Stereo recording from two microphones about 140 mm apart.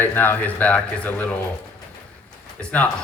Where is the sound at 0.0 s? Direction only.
15° left (ahead or behind).